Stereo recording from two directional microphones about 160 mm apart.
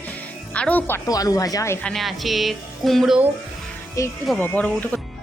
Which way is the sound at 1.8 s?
5° left (ahead or behind).